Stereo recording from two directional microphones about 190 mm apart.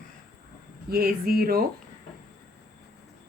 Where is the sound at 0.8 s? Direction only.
50° right (ahead or behind).